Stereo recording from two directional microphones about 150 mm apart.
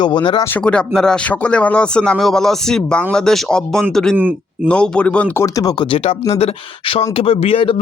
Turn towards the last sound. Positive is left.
turn(degrees=40)  # may be behind; listen again after turning